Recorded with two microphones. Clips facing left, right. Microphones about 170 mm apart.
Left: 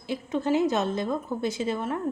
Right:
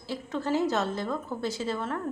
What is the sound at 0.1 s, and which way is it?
A woman's voice, 20° left (ahead or behind).